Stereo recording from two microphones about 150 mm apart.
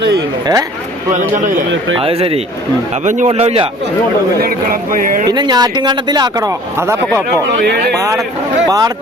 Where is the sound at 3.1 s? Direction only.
50° right (ahead or behind).